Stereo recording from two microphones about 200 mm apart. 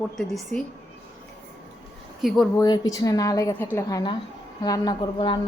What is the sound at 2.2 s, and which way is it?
Speech, centre (ahead or behind).